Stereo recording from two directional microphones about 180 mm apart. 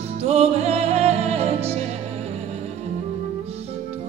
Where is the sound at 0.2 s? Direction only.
35° right (ahead or behind).